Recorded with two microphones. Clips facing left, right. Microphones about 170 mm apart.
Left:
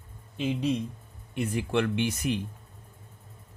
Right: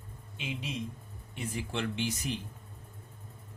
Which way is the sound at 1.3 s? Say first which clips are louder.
Left 9 dB; 65° left (ahead or behind).